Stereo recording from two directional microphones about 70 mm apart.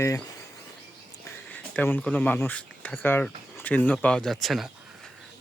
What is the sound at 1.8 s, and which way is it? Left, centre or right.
Speech, left.